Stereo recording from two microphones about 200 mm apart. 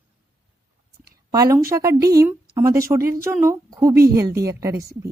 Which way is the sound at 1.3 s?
15° right (ahead or behind).